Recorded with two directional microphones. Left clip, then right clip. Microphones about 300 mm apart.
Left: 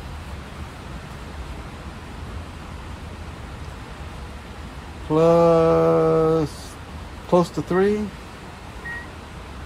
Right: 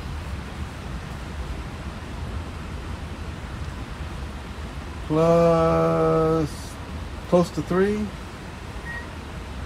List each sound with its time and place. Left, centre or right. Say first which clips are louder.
5.1 s mantra: left 3 dB; left
7.2 s speech: left 2 dB; left